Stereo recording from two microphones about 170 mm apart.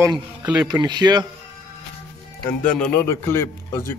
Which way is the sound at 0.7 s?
25° right (ahead or behind).